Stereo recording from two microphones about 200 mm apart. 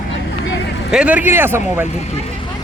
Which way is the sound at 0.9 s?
5° right (ahead or behind).